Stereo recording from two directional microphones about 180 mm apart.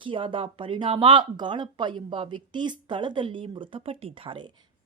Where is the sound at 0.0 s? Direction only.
30° right (ahead or behind).